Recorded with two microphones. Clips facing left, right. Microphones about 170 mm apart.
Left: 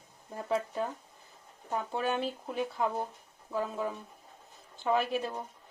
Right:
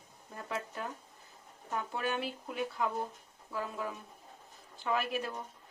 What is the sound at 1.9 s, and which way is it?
Speech, 30° left (ahead or behind).